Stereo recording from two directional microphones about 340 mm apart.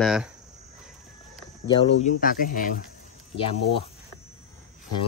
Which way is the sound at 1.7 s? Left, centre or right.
Centre.